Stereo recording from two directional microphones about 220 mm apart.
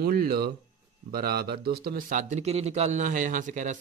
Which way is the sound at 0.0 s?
45° right (ahead or behind).